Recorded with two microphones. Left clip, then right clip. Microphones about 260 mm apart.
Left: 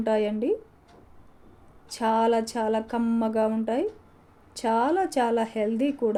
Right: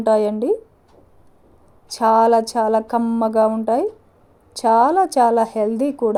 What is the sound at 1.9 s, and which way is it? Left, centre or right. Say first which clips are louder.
A woman's voice: right 9 dB; right.